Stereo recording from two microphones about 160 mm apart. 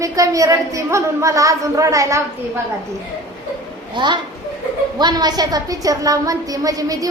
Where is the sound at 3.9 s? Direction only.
30° right (ahead or behind).